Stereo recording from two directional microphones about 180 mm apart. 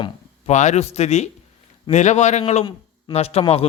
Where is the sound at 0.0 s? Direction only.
40° left (ahead or behind).